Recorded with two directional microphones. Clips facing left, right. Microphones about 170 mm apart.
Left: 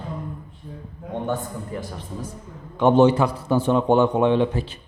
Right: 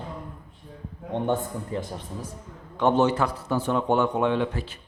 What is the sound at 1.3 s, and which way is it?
Speech, 25° right (ahead or behind).